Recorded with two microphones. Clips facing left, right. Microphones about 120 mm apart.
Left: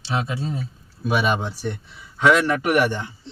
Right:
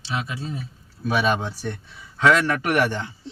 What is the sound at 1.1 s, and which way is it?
A man's voice, 15° left (ahead or behind).